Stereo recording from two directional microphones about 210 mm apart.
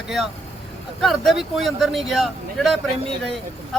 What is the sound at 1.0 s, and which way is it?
Speech, centre (ahead or behind).